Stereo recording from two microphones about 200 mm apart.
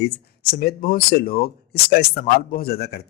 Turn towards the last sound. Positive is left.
turn(degrees=55)  # may be behind; listen again after turning